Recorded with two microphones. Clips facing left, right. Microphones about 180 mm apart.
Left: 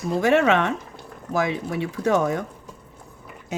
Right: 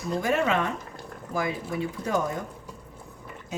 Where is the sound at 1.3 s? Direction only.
90° left.